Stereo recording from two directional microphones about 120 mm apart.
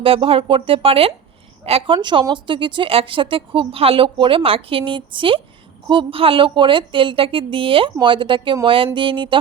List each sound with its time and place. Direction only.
0.0 s a woman's voice: 50° right (ahead or behind)
2.0 s speech: 40° right (ahead or behind)